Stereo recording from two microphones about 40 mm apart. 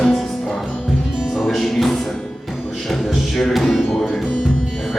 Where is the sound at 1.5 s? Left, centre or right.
Centre.